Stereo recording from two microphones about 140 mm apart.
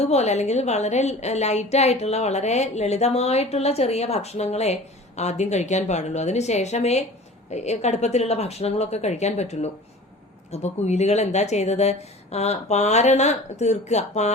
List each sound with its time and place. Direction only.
0.0 s a woman's voice: 50° left (ahead or behind)